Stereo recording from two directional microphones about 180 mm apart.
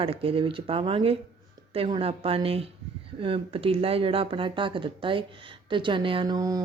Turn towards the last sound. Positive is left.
turn(degrees=-20)  # may be behind; listen again after turning